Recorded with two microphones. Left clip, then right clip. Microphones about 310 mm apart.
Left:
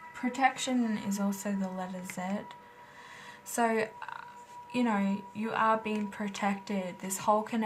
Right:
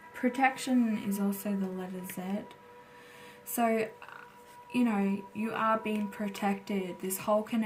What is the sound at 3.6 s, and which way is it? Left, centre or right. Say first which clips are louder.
Speech: even; centre.